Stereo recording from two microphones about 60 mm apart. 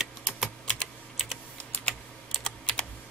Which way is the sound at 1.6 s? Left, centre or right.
Centre.